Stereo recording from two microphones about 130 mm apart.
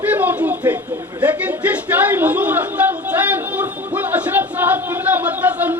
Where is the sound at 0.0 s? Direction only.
15° right (ahead or behind).